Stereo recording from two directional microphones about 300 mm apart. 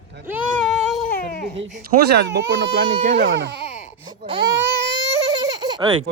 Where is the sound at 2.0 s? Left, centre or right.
Right.